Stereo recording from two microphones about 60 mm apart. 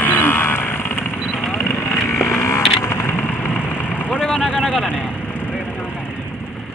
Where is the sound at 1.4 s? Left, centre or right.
Centre.